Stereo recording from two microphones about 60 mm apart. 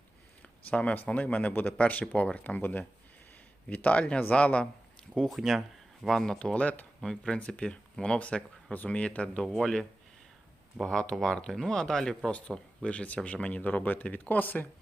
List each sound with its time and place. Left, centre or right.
0.4 s speech: left
5.3 s speech: centre
6.4 s speech: left
7.0 s speech: centre
7.3 s speech: centre
9.4 s speech: centre
10.8 s speech: centre
12.3 s speech: centre